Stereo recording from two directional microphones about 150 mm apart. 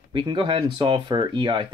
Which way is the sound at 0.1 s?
30° right (ahead or behind).